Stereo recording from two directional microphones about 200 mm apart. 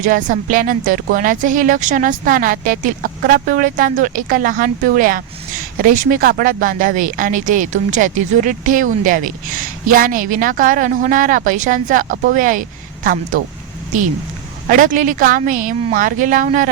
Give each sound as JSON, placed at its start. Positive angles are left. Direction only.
{"t": 0.0, "sound": "speech", "side_deg": -40}
{"t": 14.7, "sound": "speech", "side_deg": -40}